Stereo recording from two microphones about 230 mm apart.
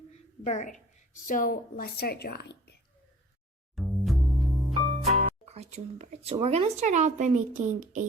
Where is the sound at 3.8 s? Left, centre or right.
Centre.